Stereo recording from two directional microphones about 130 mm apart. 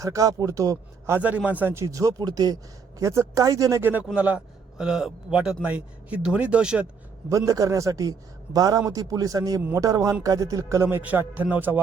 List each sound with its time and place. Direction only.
0.0 s a man's voice: 25° right (ahead or behind); by 6.8 s 10° right (ahead or behind)
7.3 s a man's voice: 25° right (ahead or behind)
10.8 s a man's voice: 10° right (ahead or behind)